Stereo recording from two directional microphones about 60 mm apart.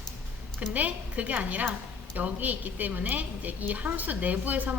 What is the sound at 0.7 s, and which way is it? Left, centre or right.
A woman's voice, right.